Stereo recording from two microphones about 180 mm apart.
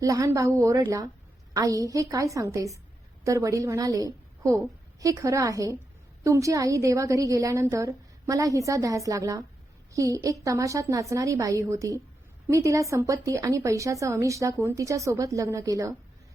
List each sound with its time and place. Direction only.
0.0 s a woman's voice: 20° right (ahead or behind)